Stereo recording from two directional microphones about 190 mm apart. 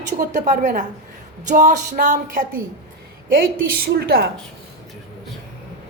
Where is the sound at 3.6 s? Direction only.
55° right (ahead or behind).